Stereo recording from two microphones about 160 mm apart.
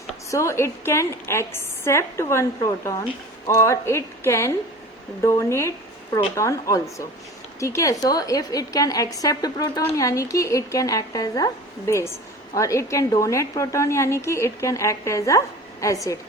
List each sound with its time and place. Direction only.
0.3 s a woman's voice: 20° left (ahead or behind)